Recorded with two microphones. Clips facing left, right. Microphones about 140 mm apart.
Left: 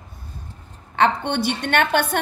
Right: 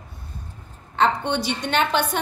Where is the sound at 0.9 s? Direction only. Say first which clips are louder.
Left 1 dB; 60° left (ahead or behind).